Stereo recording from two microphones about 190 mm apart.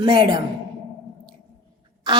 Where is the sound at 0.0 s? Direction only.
25° right (ahead or behind).